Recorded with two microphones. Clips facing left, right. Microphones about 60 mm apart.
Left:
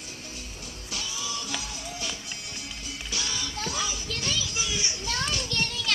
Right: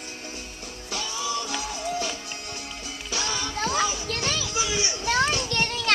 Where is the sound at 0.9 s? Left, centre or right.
Right.